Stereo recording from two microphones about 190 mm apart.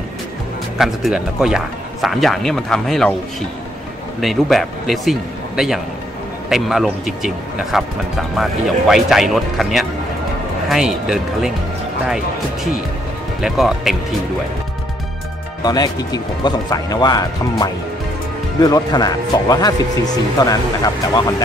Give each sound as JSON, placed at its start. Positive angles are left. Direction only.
{"t": 0.7, "sound": "speech", "side_deg": 0}
{"t": 4.2, "sound": "speech", "side_deg": 0}
{"t": 6.5, "sound": "speech", "side_deg": 0}
{"t": 13.4, "sound": "speech", "side_deg": 0}
{"t": 15.6, "sound": "speech", "side_deg": 20}